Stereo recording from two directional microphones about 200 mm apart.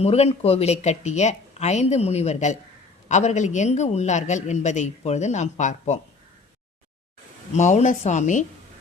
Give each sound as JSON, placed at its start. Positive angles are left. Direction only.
{"t": 0.0, "sound": "a man's voice", "side_deg": 30}
{"t": 7.5, "sound": "a man's voice", "side_deg": 35}